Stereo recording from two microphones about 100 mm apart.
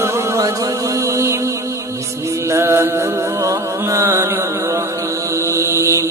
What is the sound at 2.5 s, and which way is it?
Music, 25° right (ahead or behind).